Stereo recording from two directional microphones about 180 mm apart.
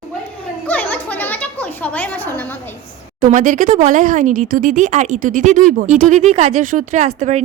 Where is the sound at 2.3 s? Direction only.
10° left (ahead or behind).